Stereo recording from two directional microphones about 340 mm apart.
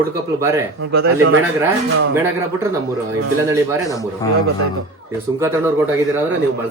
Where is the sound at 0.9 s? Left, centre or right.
Right.